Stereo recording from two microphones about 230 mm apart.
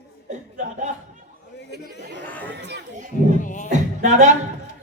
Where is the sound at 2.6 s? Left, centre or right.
Right.